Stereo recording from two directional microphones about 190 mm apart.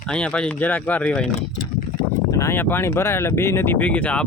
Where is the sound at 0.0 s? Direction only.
5° left (ahead or behind).